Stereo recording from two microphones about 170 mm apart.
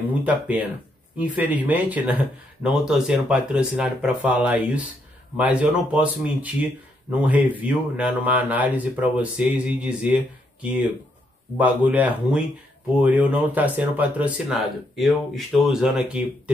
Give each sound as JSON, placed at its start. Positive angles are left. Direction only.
{"t": 0.2, "sound": "speech", "side_deg": -10}